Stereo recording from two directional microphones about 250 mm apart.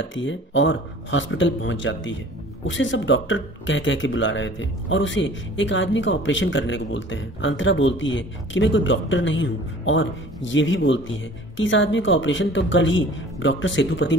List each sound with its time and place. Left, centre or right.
0.0 s speech: left